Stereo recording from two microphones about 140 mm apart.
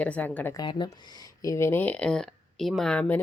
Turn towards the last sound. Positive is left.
turn(degrees=10)  # may be behind; listen again after turning